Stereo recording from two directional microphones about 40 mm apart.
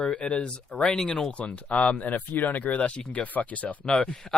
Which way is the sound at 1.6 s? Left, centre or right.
Left.